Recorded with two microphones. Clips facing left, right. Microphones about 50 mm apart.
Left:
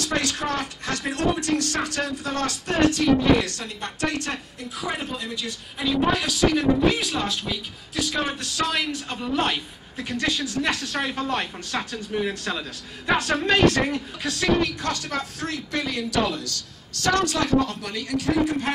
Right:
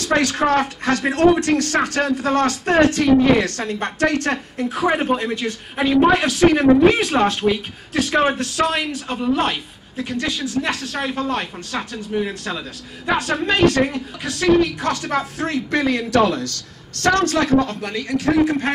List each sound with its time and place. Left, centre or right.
0.0 s speech: right
12.1 s a man's voice: centre
13.9 s speech: right
15.7 s a woman's voice: right